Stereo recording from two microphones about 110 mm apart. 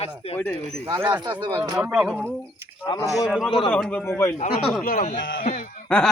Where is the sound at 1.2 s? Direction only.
45° right (ahead or behind).